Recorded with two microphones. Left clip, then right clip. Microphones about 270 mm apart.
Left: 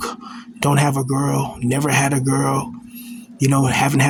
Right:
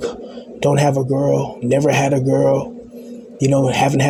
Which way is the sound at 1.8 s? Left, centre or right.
Left.